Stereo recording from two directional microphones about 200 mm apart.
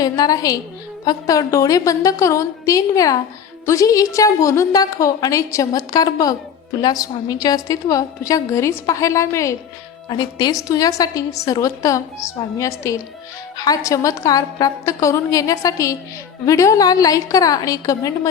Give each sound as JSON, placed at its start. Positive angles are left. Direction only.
{"t": 0.0, "sound": "a woman's voice", "side_deg": 20}